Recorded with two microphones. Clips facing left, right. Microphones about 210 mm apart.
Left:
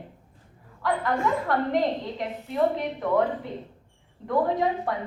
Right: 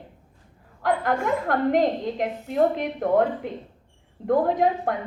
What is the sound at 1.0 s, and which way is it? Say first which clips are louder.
A woman's voice: right 2 dB; 45° right (ahead or behind).